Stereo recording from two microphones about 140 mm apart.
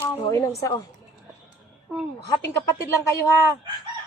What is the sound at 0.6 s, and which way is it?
Speech, 25° left (ahead or behind).